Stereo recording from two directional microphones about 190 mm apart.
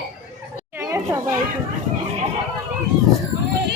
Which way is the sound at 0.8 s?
15° right (ahead or behind).